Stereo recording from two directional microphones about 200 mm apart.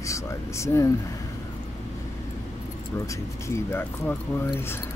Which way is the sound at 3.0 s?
15° left (ahead or behind).